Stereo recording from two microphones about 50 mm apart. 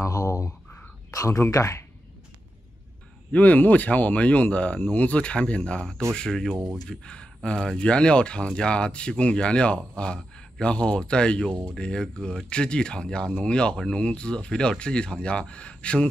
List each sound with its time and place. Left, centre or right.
0.0 s speech: left
1.5 s speech: left
3.3 s speech: left
5.8 s speech: centre